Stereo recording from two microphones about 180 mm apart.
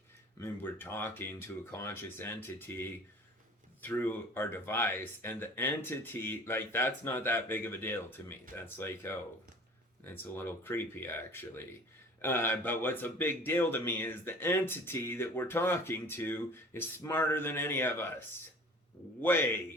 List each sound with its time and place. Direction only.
0.3 s speech: 10° left (ahead or behind)